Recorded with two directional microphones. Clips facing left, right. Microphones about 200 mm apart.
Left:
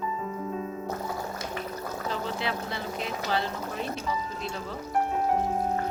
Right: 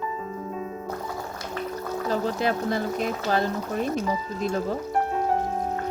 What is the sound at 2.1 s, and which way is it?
Speech, 45° right (ahead or behind).